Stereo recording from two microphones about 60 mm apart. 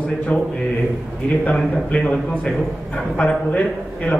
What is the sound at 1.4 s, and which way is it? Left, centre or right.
A man's voice, left.